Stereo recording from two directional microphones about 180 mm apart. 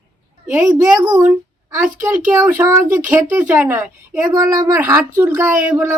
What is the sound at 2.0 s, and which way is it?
Speech, 10° right (ahead or behind).